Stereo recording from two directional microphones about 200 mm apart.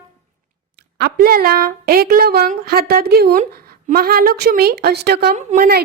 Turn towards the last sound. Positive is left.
turn(degrees=-50)  # may be behind; listen again after turning